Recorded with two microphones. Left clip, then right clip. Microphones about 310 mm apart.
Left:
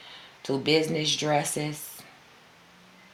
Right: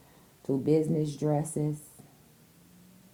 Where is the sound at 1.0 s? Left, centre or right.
Right.